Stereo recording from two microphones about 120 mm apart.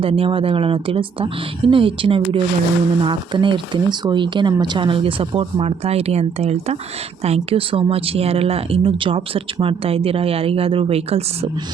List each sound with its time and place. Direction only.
0.0 s speech: 50° right (ahead or behind)